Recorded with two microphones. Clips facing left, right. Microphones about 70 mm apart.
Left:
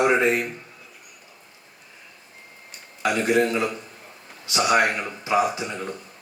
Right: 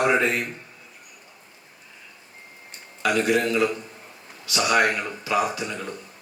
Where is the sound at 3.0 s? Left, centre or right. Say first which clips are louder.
Left 1 dB; left.